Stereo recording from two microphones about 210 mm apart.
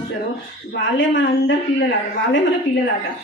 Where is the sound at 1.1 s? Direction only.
60° left (ahead or behind).